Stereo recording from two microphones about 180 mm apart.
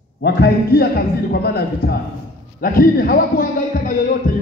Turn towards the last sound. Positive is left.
turn(degrees=50)  # may be behind; listen again after turning